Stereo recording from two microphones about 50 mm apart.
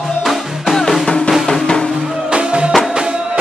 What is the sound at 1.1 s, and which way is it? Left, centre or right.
Music, centre.